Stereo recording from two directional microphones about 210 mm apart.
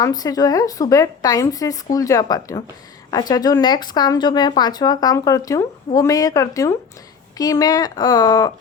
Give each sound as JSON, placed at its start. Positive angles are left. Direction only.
{"t": 0.0, "sound": "speech", "side_deg": 15}